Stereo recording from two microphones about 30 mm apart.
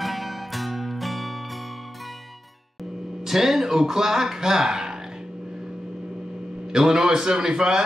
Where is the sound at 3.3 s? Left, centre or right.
Centre.